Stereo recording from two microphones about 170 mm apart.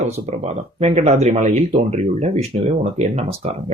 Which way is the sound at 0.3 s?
40° right (ahead or behind).